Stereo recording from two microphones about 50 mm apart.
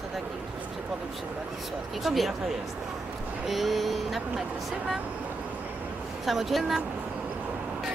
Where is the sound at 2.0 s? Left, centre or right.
Centre.